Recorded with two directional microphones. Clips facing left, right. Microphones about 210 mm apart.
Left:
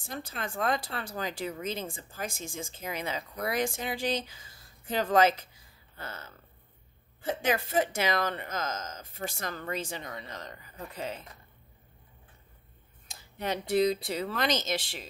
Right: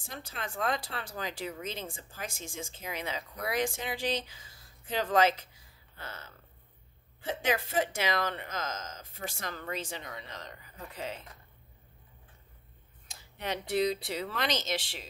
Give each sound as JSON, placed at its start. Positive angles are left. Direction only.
{"t": 0.1, "sound": "speech", "side_deg": 45}
{"t": 5.9, "sound": "a sound", "side_deg": 45}
{"t": 7.4, "sound": "speech", "side_deg": 45}
{"t": 13.4, "sound": "speech", "side_deg": 45}